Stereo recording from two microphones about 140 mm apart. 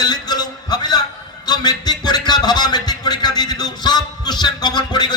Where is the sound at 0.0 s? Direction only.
30° left (ahead or behind).